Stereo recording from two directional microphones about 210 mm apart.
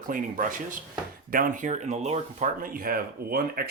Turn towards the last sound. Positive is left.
turn(degrees=-45)  # may be behind; listen again after turning